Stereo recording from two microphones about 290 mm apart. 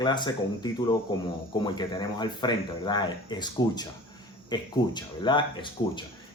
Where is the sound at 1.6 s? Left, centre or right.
Centre.